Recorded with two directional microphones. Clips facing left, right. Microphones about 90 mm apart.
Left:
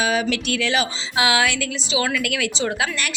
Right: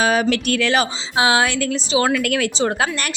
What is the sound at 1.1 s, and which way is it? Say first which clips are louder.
A woman's voice: right 3 dB; 30° right (ahead or behind).